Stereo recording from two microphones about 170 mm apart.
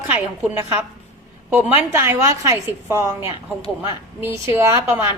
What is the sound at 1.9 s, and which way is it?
A woman's voice, 15° right (ahead or behind).